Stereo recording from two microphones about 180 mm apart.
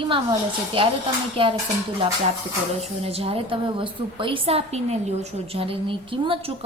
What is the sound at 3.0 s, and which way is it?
A woman's voice, 35° right (ahead or behind).